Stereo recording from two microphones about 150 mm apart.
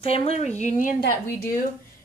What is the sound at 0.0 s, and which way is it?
Speech, 40° left (ahead or behind).